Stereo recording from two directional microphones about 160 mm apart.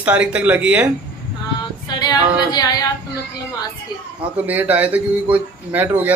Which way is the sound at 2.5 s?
25° left (ahead or behind).